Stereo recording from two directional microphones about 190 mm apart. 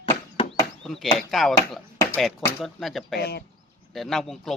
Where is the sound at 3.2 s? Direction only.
60° left (ahead or behind).